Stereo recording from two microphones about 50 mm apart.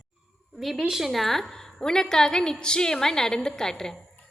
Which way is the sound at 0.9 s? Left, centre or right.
Centre.